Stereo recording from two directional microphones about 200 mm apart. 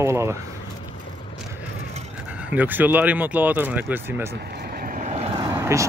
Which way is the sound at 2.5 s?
10° right (ahead or behind).